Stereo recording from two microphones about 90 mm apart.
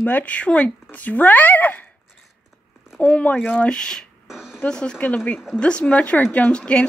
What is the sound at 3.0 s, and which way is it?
A woman's voice, 15° left (ahead or behind).